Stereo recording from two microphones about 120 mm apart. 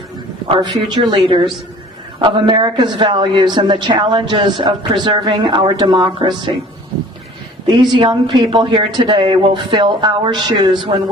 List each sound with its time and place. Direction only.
0.6 s speech: 40° right (ahead or behind)
8.0 s speech: 40° right (ahead or behind)